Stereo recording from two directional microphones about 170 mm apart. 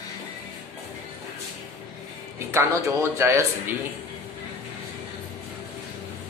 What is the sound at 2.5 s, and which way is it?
A man's voice, 15° right (ahead or behind).